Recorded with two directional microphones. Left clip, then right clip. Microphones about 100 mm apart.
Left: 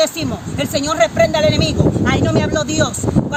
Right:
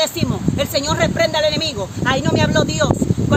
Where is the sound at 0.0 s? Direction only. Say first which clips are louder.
Left 2 dB; 35° right (ahead or behind).